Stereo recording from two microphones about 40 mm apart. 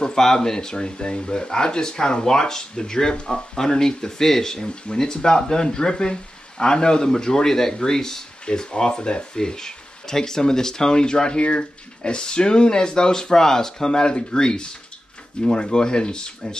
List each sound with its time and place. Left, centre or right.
0.0 s speech: centre